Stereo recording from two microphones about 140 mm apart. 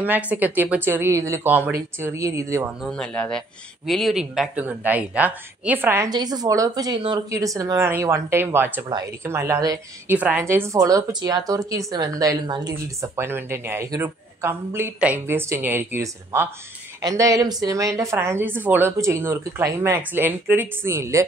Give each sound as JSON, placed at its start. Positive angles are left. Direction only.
{"t": 0.0, "sound": "speech", "side_deg": -10}
{"t": 2.8, "sound": "speech", "side_deg": 5}
{"t": 6.0, "sound": "a woman's voice", "side_deg": -30}
{"t": 8.8, "sound": "speech", "side_deg": -30}
{"t": 9.2, "sound": "a woman's voice", "side_deg": -20}
{"t": 10.0, "sound": "a woman's voice", "side_deg": -10}